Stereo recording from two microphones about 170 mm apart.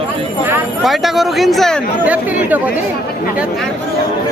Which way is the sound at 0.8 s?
Centre (ahead or behind).